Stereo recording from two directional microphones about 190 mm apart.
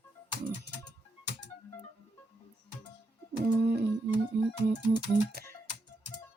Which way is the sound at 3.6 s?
60° right (ahead or behind).